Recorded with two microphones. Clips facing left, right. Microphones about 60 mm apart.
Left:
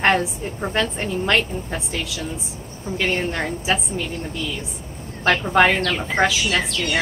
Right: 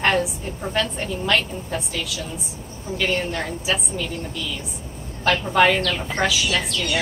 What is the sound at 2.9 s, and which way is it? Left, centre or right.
A woman's voice, left.